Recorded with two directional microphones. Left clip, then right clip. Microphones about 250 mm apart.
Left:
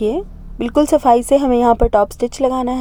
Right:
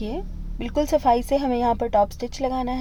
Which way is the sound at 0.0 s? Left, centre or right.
Left.